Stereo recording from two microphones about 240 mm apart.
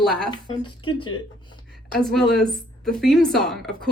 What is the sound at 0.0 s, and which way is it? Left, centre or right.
Speech, centre.